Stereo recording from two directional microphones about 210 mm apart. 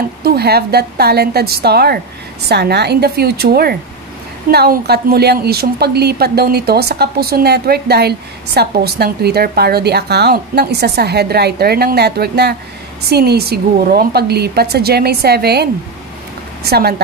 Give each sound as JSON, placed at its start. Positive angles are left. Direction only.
{"t": 0.2, "sound": "a woman's voice", "side_deg": -50}